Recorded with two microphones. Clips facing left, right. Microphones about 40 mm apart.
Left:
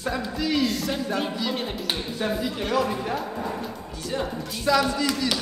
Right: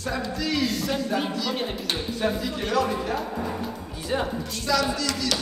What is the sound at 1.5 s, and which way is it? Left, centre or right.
Speech, centre.